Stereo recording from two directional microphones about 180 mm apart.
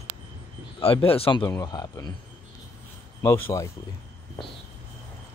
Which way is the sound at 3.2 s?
15° left (ahead or behind).